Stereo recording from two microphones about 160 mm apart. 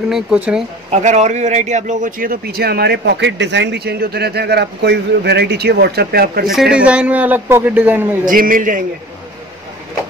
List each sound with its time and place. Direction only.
0.1 s speech: 5° right (ahead or behind)
0.9 s speech: 45° right (ahead or behind); by 6.4 s 85° right
6.4 s a man's voice: centre (ahead or behind)
8.3 s a man's voice: 60° right (ahead or behind)